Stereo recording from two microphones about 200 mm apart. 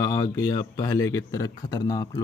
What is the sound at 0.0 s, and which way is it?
Speech, 20° left (ahead or behind).